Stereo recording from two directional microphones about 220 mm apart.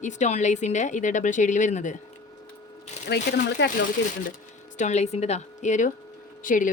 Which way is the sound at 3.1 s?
50° left (ahead or behind).